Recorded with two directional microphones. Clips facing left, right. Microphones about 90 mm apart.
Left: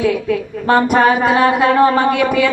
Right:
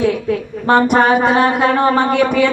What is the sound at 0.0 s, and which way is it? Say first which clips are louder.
Speech: even; 30° right (ahead or behind).